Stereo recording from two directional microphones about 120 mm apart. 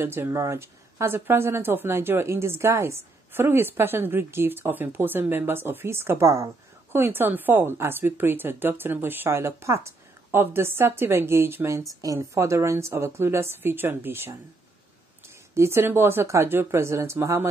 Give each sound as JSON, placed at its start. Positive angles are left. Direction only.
{"t": 0.0, "sound": "speech", "side_deg": -20}
{"t": 15.5, "sound": "speech", "side_deg": -20}